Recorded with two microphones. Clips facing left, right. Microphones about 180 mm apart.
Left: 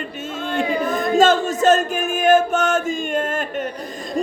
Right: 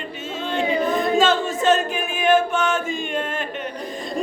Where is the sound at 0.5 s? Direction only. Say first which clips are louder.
Even; 45° left (ahead or behind).